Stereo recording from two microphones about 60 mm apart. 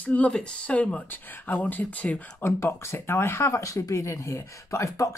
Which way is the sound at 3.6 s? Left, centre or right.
Left.